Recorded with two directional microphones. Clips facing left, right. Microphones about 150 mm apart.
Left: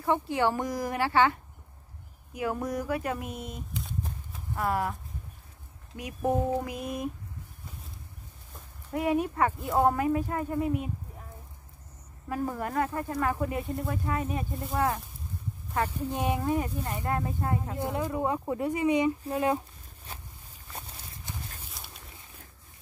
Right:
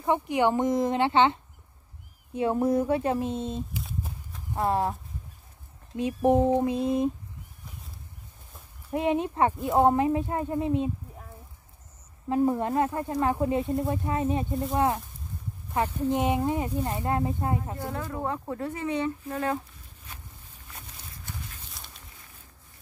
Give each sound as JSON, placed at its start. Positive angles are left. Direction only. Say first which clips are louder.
{"t": 0.0, "sound": "speech", "louder": "right 2 dB", "side_deg": -20}
{"t": 3.7, "sound": "a sound", "louder": "even", "side_deg": -5}
{"t": 4.6, "sound": "speech", "louder": "right 3 dB", "side_deg": -25}
{"t": 5.9, "sound": "speech", "louder": "right 6 dB", "side_deg": -25}
{"t": 8.9, "sound": "speech", "louder": "right 1 dB", "side_deg": -25}
{"t": 12.3, "sound": "speech", "louder": "right 7 dB", "side_deg": -25}
{"t": 14.5, "sound": "speech", "louder": "right 6 dB", "side_deg": 0}
{"t": 15.7, "sound": "speech", "louder": "right 4 dB", "side_deg": -15}
{"t": 17.7, "sound": "speech", "louder": "left 3 dB", "side_deg": 20}
{"t": 21.3, "sound": "horse", "louder": "even", "side_deg": 20}
{"t": 21.8, "sound": "a sound", "louder": "left 1 dB", "side_deg": 0}